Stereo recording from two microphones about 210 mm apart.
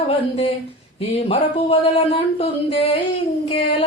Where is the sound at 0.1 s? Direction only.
25° left (ahead or behind).